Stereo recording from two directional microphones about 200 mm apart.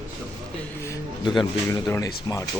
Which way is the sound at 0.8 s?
20° left (ahead or behind).